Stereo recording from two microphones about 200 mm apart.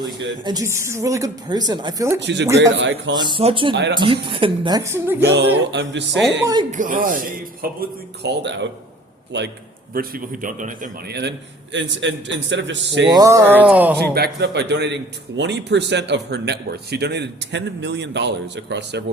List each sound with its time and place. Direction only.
0.4 s a woman's voice: 15° right (ahead or behind)
2.2 s a man's voice: 60° right (ahead or behind)
3.2 s a woman's voice: 25° right (ahead or behind)
5.2 s a man's voice: 60° right (ahead or behind)
6.4 s a woman's voice: 20° right (ahead or behind)
6.7 s a man's voice: 40° right (ahead or behind); by 9.5 s 65° right (ahead or behind)
9.9 s a man's voice: 45° right (ahead or behind); by 13.1 s 65° right (ahead or behind)
13.1 s a woman's voice: 15° right (ahead or behind)
14.0 s a man's voice: 55° right (ahead or behind)